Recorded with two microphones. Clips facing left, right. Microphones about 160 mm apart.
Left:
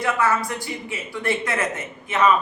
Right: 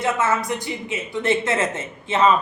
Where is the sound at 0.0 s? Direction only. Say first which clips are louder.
Even; 20° right (ahead or behind).